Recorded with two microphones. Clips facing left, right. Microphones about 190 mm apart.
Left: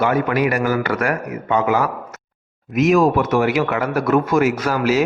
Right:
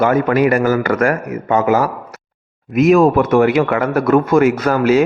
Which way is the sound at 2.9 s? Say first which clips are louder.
Right 4 dB; 55° right (ahead or behind).